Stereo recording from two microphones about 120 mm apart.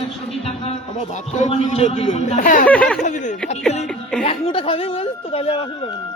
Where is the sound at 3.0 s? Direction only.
90° left.